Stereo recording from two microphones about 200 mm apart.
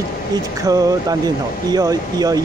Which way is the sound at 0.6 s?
20° right (ahead or behind).